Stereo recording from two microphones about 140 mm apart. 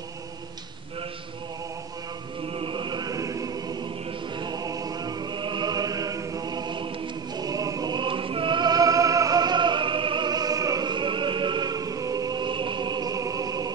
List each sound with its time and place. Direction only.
2.5 s chant: 35° right (ahead or behind)
7.3 s music: 25° right (ahead or behind)